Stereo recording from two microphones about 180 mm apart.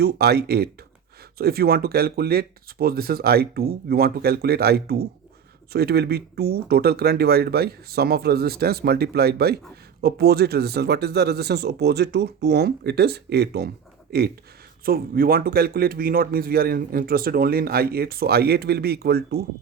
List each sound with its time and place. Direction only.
0.0 s speech: 60° right (ahead or behind)